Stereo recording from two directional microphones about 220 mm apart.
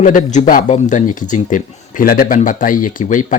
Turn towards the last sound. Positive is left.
turn(degrees=35)  # may be behind; listen again after turning